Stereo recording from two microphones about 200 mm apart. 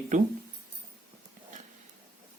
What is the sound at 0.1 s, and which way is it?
Speech, 40° right (ahead or behind).